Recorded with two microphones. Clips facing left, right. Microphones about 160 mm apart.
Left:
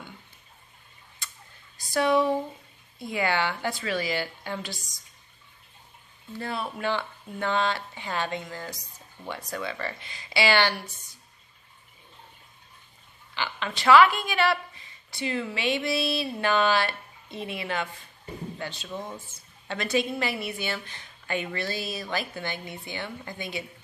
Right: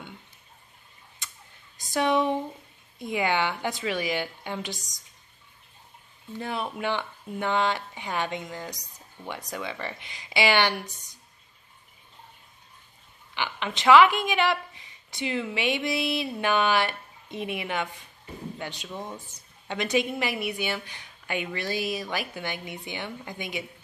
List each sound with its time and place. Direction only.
1.8 s a woman's voice: 20° right (ahead or behind)
6.3 s a woman's voice: 15° right (ahead or behind)
13.3 s a woman's voice: 15° right (ahead or behind)